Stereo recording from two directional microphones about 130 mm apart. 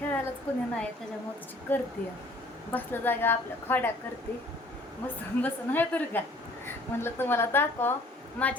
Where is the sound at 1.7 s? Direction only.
15° left (ahead or behind).